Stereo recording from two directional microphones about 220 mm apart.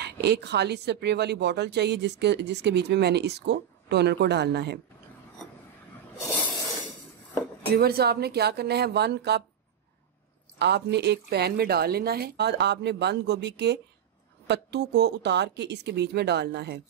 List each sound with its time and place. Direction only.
0.0 s speech: 50° right (ahead or behind)
7.7 s speech: 45° right (ahead or behind)
10.6 s speech: 50° right (ahead or behind)